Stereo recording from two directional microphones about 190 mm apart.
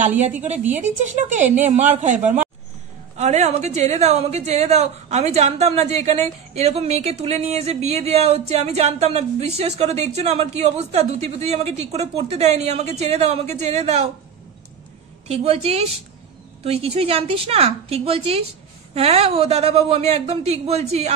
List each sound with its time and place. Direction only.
1.1 s a woman's voice: 40° right (ahead or behind)
15.2 s a woman's voice: 30° right (ahead or behind)